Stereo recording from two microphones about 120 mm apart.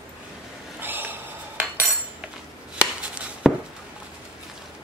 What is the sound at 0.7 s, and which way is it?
Cutlery, 15° right (ahead or behind).